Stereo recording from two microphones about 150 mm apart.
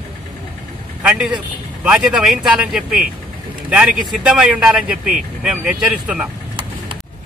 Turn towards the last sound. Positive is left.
turn(degrees=-5)  # may be behind; listen again after turning